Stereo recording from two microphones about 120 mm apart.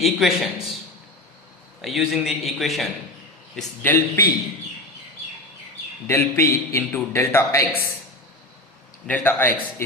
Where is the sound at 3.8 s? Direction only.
20° left (ahead or behind).